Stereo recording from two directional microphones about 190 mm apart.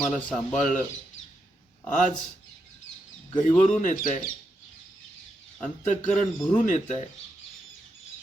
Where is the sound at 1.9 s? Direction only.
40° left (ahead or behind).